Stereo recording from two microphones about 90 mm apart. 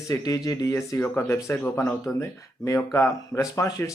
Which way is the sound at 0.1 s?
40° left (ahead or behind).